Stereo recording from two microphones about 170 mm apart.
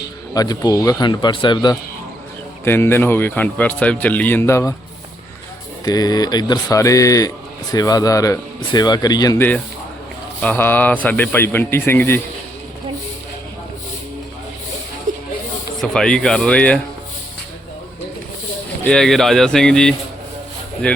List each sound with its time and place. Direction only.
0.3 s speech: 20° left (ahead or behind)
2.6 s speech: 15° left (ahead or behind)
5.8 s speech: 20° left (ahead or behind)
15.8 s speech: 5° left (ahead or behind)
18.9 s speech: centre (ahead or behind)